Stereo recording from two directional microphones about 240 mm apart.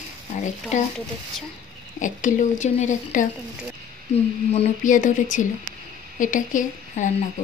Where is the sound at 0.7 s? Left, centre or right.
Left.